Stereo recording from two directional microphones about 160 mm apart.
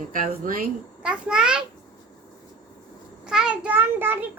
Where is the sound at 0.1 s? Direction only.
60° right (ahead or behind).